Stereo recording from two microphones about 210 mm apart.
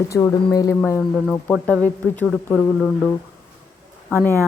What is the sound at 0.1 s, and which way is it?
A woman's voice, 15° left (ahead or behind).